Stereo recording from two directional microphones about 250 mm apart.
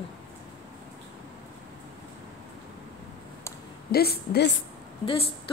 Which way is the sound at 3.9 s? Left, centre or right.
Left.